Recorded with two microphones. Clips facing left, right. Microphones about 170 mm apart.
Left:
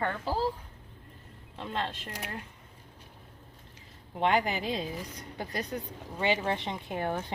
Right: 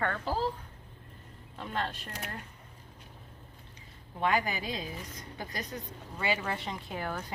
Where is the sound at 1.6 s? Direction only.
25° left (ahead or behind).